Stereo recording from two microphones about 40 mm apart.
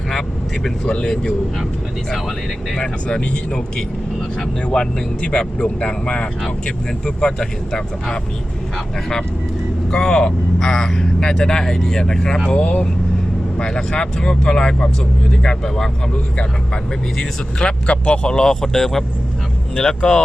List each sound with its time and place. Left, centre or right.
0.1 s speech: centre
0.9 s speech: left
2.7 s speech: left
9.9 s speech: centre
12.5 s speech: left
17.2 s speech: left
19.7 s speech: left